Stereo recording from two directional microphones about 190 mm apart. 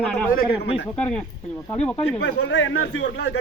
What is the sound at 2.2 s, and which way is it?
Speech, 75° left (ahead or behind).